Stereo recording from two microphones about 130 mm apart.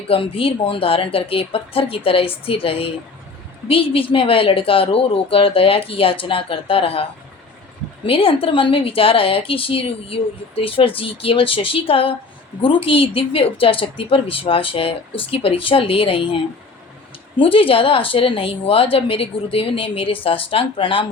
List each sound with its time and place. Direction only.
0.1 s a woman's voice: 45° left (ahead or behind)
8.0 s a woman's voice: 45° left (ahead or behind)